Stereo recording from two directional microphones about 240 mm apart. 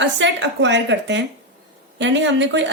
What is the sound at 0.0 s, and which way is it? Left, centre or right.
Speech, right.